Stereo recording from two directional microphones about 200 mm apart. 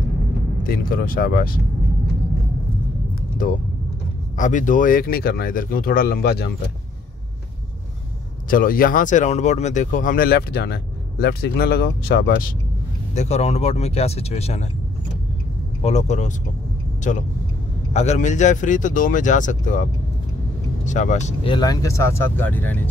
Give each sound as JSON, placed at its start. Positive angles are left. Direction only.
{"t": 0.7, "sound": "speech", "side_deg": 45}
{"t": 3.4, "sound": "speech", "side_deg": 45}
{"t": 8.5, "sound": "speech", "side_deg": 45}
{"t": 13.1, "sound": "speech", "side_deg": 35}
{"t": 15.8, "sound": "speech", "side_deg": 35}
{"t": 17.9, "sound": "speech", "side_deg": 35}
{"t": 21.5, "sound": "speech", "side_deg": 15}